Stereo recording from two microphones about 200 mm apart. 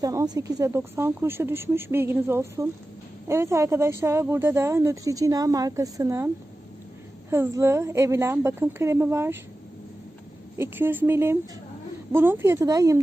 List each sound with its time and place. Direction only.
0.0 s a woman's voice: 15° right (ahead or behind)
10.6 s a woman's voice: 10° right (ahead or behind)